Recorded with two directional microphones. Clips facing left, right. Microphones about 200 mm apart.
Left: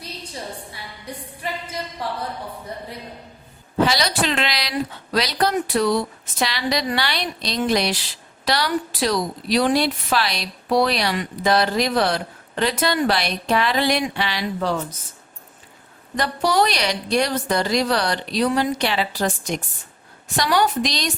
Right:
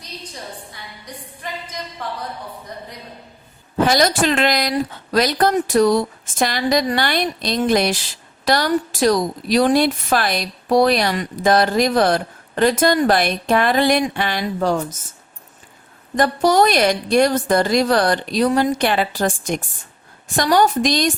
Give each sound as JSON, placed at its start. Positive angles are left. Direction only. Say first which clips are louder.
{"t": 1.0, "sound": "singing", "louder": "left 3 dB", "side_deg": 10}
{"t": 3.8, "sound": "a woman's voice", "louder": "right 4 dB", "side_deg": -50}
{"t": 16.1, "sound": "a woman's voice", "louder": "right 5 dB", "side_deg": -45}